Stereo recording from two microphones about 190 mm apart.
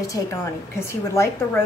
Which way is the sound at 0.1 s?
15° left (ahead or behind).